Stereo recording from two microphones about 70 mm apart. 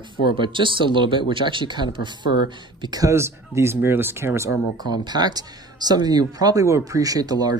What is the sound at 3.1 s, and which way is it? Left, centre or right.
Speech, right.